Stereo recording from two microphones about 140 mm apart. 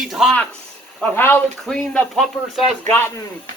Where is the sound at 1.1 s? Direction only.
15° left (ahead or behind).